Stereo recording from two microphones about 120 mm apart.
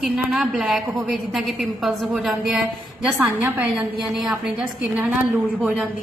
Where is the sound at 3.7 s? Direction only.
5° right (ahead or behind).